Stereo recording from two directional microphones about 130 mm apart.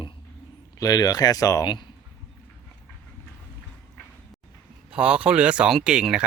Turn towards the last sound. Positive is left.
turn(degrees=-5)  # may be behind; listen again after turning